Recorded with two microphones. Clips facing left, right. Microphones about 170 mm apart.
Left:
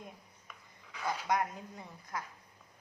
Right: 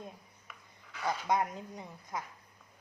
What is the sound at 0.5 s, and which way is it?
Dog, 5° right (ahead or behind).